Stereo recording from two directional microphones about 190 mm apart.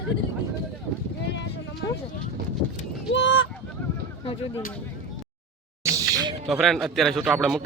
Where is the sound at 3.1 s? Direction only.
85° left.